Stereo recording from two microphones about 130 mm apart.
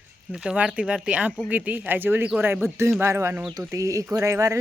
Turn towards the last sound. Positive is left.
turn(degrees=-25)  # may be behind; listen again after turning